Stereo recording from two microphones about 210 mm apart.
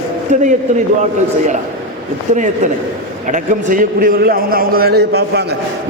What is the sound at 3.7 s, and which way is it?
A man's voice, 40° right (ahead or behind).